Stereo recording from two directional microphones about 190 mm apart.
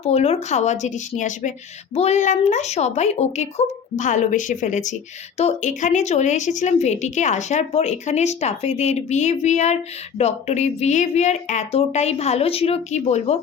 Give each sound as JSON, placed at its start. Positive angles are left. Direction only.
{"t": 0.0, "sound": "a woman's voice", "side_deg": 35}